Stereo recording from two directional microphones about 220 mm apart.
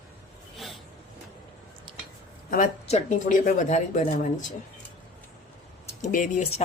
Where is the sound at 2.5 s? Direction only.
35° left (ahead or behind).